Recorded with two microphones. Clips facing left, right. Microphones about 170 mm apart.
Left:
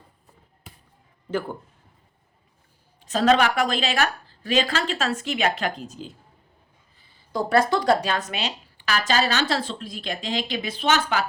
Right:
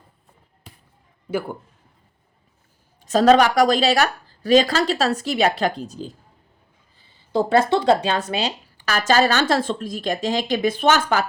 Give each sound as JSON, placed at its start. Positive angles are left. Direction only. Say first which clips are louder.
{"t": 1.3, "sound": "a man's voice", "louder": "right 2 dB", "side_deg": -10}
{"t": 3.0, "sound": "a woman's voice", "louder": "right 5 dB", "side_deg": -40}
{"t": 7.3, "sound": "speech", "louder": "right 3 dB", "side_deg": -25}